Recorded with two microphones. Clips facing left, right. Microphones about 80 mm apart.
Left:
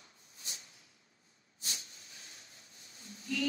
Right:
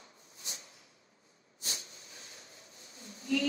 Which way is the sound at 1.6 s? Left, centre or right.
Right.